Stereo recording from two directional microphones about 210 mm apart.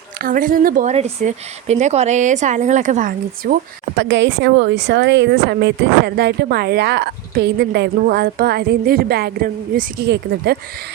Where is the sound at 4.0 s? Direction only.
60° right (ahead or behind).